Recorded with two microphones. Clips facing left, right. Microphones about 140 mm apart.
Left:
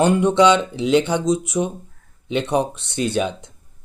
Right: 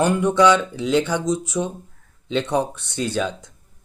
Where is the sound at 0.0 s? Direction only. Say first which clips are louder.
Left 2 dB; 25° left (ahead or behind).